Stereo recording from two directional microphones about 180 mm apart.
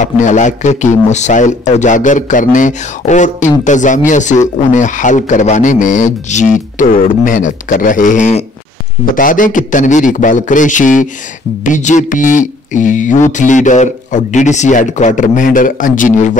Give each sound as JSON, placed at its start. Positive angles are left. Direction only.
{"t": 0.0, "sound": "a man's voice", "side_deg": 45}